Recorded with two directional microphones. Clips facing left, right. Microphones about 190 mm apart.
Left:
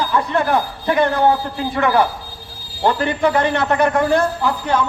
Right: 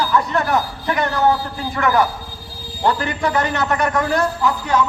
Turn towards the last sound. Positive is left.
turn(degrees=30)  # may be behind; listen again after turning